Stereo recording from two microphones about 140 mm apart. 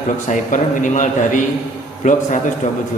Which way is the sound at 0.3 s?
65° left (ahead or behind).